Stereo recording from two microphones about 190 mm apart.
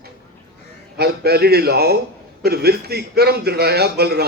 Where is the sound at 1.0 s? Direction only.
55° right (ahead or behind).